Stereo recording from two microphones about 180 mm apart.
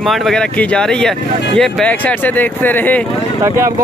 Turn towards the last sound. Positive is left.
turn(degrees=-15)  # may be behind; listen again after turning